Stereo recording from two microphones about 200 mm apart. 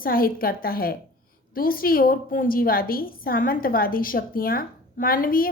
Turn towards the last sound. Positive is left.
turn(degrees=45)  # may be behind; listen again after turning